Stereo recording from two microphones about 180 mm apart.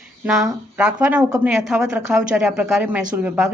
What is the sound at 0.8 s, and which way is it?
A woman's voice, 5° right (ahead or behind).